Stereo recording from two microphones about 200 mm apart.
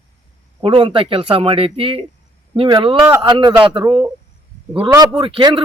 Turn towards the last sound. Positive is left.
turn(degrees=-25)  # may be behind; listen again after turning